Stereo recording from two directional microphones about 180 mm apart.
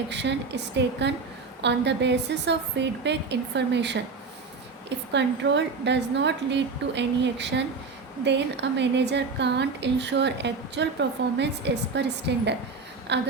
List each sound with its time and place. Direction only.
0.1 s a woman's voice: 75° right (ahead or behind)